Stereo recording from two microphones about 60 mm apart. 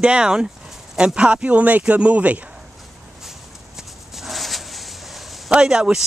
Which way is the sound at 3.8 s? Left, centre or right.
Centre.